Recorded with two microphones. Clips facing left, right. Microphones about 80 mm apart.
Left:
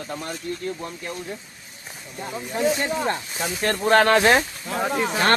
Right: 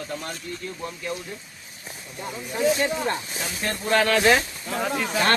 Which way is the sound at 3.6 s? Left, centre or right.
Left.